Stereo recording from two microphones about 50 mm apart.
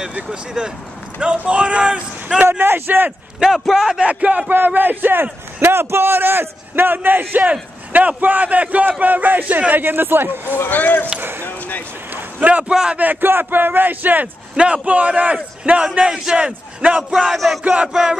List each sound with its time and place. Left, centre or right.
0.6 s a man's voice: centre
2.6 s a man's voice: right
3.3 s speech: centre
4.0 s a man's voice: right
4.6 s a man's voice: right
10.5 s speech: left
11.1 s a sound: right
11.4 s basketball bounce: left
12.1 s a sound: right
12.4 s a man's voice: right
17.1 s music: centre
17.9 s speech: centre